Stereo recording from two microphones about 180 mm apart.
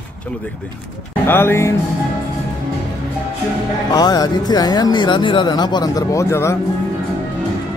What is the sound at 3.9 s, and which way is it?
Speech, 20° left (ahead or behind).